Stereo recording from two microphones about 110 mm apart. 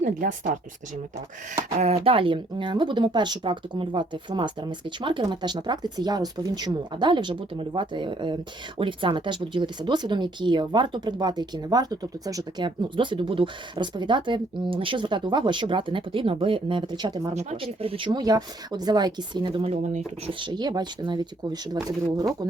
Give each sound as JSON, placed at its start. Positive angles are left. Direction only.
{"t": 0.5, "sound": "speech", "side_deg": -90}
{"t": 2.0, "sound": "speech", "side_deg": -50}
{"t": 17.3, "sound": "speech", "side_deg": -75}
{"t": 18.2, "sound": "speech", "side_deg": -35}
{"t": 19.6, "sound": "speech", "side_deg": -80}
{"t": 20.4, "sound": "speech", "side_deg": -40}